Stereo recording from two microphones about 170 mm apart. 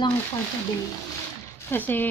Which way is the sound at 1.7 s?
10° left (ahead or behind).